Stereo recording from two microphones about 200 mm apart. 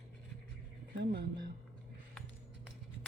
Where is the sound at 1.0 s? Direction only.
55° right (ahead or behind).